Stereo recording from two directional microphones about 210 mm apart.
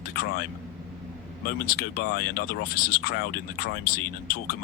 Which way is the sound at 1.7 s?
45° left (ahead or behind).